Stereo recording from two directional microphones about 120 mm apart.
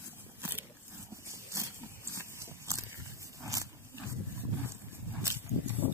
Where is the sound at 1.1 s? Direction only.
25° right (ahead or behind).